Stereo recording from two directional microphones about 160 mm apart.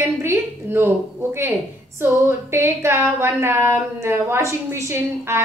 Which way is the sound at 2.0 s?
15° right (ahead or behind).